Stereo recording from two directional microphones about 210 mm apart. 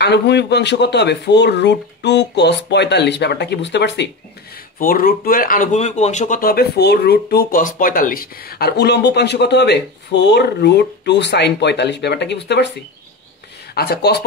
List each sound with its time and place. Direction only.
0.0 s speech: 55° left (ahead or behind)
4.7 s speech: 45° left (ahead or behind)
13.7 s speech: 50° left (ahead or behind)